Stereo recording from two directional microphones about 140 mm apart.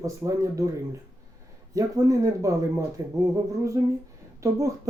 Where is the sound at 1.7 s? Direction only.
25° right (ahead or behind).